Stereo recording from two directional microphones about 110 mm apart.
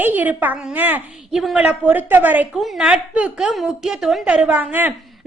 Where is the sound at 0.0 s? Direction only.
15° right (ahead or behind).